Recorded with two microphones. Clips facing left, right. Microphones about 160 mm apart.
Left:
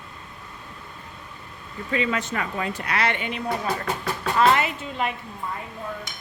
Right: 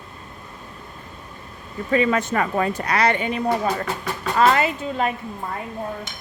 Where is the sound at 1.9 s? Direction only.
45° right (ahead or behind).